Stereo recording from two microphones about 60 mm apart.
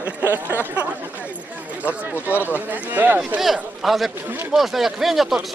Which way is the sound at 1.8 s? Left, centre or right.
Right.